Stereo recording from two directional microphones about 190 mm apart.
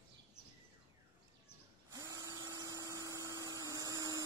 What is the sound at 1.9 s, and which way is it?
Dental drill, 15° right (ahead or behind).